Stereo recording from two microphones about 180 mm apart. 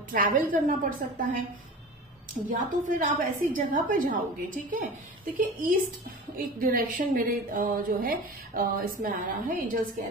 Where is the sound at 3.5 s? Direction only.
50° right (ahead or behind).